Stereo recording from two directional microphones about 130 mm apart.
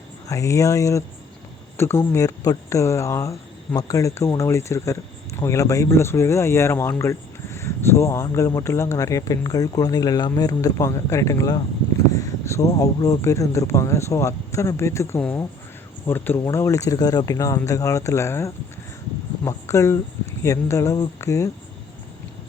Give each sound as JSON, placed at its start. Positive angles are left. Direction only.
{"t": 0.3, "sound": "speech", "side_deg": 25}